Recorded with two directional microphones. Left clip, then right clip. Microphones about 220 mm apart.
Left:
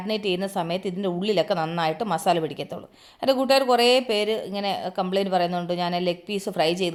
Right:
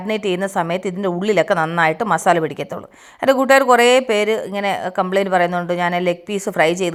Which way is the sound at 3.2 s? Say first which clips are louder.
Right 7 dB; 25° right (ahead or behind).